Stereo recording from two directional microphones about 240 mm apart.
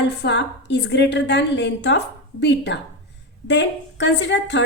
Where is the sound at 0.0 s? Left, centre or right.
Left.